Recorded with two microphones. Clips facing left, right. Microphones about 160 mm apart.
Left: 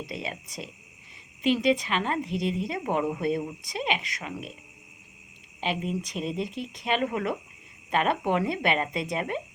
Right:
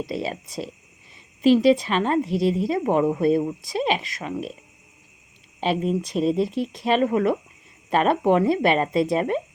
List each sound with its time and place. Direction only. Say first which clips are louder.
0.0 s a woman's voice: right 8 dB; 30° right (ahead or behind)
5.6 s a woman's voice: right 7 dB; 35° right (ahead or behind)